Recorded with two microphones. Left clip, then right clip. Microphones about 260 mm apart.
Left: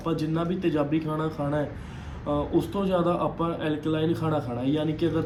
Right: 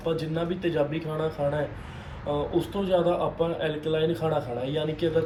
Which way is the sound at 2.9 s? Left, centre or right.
Left.